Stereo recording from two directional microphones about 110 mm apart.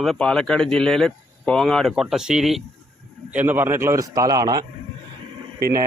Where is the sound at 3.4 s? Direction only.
20° right (ahead or behind); by 4.6 s 35° right (ahead or behind).